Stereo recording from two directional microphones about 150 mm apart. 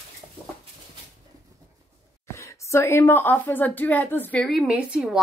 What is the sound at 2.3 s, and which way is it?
Speech, 20° left (ahead or behind).